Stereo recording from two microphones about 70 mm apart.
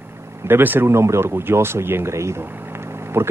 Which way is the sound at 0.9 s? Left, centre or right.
Right.